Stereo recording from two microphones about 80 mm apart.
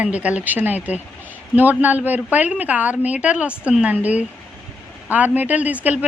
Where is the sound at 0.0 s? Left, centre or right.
Centre.